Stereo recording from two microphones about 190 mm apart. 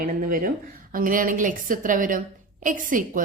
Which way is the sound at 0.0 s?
45° right (ahead or behind).